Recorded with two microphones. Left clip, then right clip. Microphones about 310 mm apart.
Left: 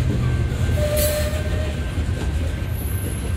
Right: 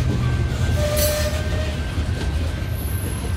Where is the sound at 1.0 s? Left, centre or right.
Centre.